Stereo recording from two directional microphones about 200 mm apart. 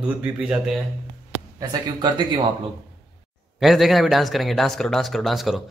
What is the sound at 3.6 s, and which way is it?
Mantra, centre (ahead or behind).